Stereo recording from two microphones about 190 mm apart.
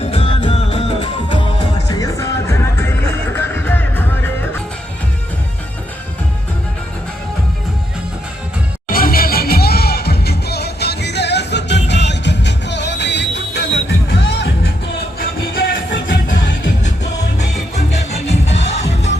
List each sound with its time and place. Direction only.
0.0 s music: 30° left (ahead or behind); by 4.0 s 10° left (ahead or behind)
8.9 s music: 50° left (ahead or behind)
15.5 s music: 50° left (ahead or behind)
17.7 s music: 35° left (ahead or behind)